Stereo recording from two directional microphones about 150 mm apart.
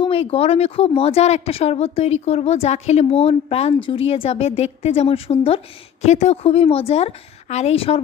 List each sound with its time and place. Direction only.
0.0 s a woman's voice: 40° left (ahead or behind)